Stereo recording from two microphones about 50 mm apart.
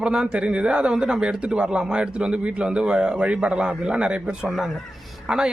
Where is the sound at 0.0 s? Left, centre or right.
Centre.